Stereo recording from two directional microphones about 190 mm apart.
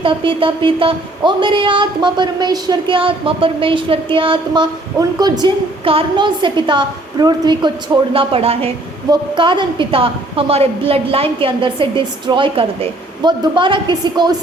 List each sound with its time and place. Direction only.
0.0 s a woman's voice: 25° right (ahead or behind)